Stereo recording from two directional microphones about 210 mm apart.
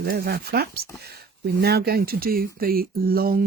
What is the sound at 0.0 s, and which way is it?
Speech, 45° right (ahead or behind).